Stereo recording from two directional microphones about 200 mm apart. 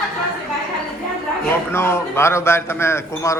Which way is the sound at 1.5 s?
10° left (ahead or behind).